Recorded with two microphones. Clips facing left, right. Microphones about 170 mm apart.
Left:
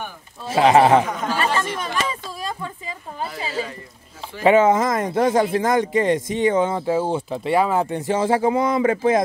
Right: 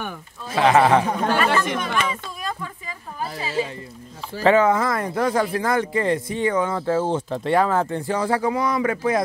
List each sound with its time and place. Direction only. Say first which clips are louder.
0.5 s speech: left 2 dB; 25° left (ahead or behind)
2.0 s a sound: even; 30° left (ahead or behind)
4.4 s speech: left 2 dB; 20° left (ahead or behind)